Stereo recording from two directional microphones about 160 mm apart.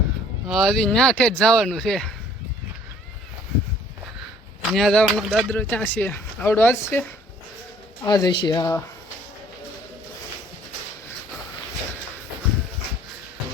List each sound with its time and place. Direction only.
0.4 s speech: centre (ahead or behind)
4.7 s speech: 5° left (ahead or behind)
8.0 s speech: 25° left (ahead or behind)